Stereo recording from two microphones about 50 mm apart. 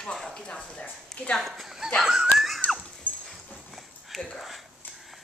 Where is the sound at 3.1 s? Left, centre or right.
Left.